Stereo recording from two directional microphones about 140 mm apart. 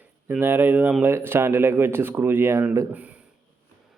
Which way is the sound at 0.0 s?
15° right (ahead or behind).